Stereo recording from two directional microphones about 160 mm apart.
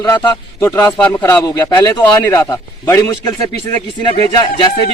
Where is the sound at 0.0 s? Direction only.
20° left (ahead or behind).